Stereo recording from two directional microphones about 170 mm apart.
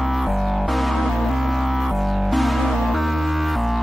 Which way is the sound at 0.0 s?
Centre (ahead or behind).